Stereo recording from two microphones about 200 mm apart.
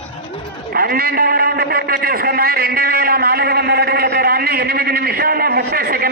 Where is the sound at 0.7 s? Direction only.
50° right (ahead or behind).